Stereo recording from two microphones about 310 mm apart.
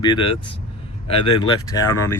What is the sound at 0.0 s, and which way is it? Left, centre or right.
Speech, centre.